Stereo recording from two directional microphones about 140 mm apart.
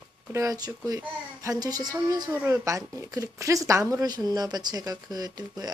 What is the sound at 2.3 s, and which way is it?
Speech, 15° right (ahead or behind).